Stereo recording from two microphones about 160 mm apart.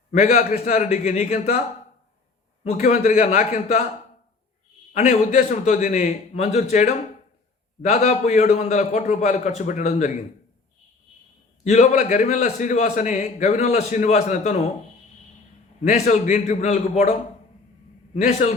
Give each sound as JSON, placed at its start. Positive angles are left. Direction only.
{"t": 0.1, "sound": "a man's voice", "side_deg": 45}
{"t": 2.6, "sound": "a man's voice", "side_deg": 45}
{"t": 4.9, "sound": "a man's voice", "side_deg": 45}
{"t": 11.6, "sound": "a man's voice", "side_deg": 45}
{"t": 15.8, "sound": "a man's voice", "side_deg": 45}